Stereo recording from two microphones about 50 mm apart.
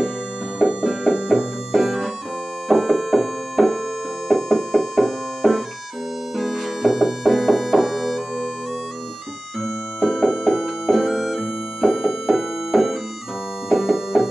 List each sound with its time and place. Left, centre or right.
0.6 s music: centre
9.6 s music: centre